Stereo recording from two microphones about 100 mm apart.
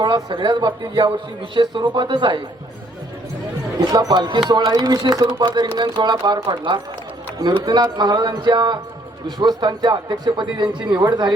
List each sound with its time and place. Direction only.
0.3 s speech: 45° right (ahead or behind)
3.8 s speech: 45° right (ahead or behind)